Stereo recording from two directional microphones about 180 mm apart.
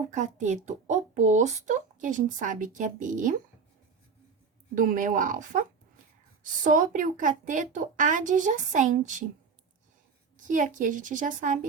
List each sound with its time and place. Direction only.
0.1 s speech: 40° right (ahead or behind)
4.7 s speech: 50° right (ahead or behind)
6.7 s speech: 50° right (ahead or behind)
10.3 s speech: 45° right (ahead or behind)